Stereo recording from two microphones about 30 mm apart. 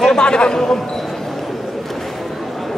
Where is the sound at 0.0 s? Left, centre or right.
Left.